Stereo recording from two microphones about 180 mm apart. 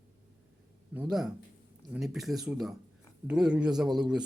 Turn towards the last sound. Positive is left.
turn(degrees=-5)  # may be behind; listen again after turning